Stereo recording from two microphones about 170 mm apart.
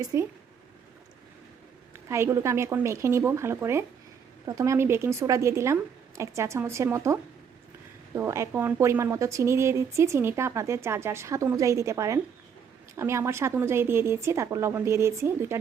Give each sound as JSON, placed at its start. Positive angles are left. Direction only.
{"t": 0.0, "sound": "speech", "side_deg": -20}
{"t": 2.0, "sound": "a woman's voice", "side_deg": -15}